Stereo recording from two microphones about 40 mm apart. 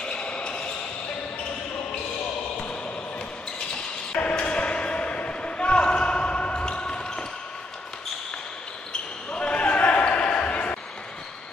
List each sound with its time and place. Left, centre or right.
0.0 s basketball bounce: left
2.5 s basketball bounce: left
4.4 s basketball bounce: left
9.3 s basketball bounce: left